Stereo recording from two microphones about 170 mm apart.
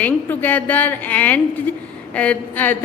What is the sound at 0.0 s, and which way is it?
A woman's voice, 10° left (ahead or behind).